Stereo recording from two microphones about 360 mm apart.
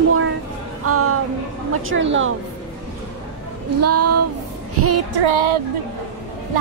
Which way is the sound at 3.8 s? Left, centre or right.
Right.